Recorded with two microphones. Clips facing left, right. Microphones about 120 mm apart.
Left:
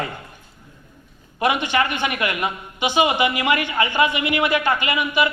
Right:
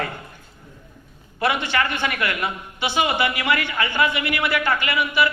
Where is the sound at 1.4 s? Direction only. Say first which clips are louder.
Left 2 dB; 15° left (ahead or behind).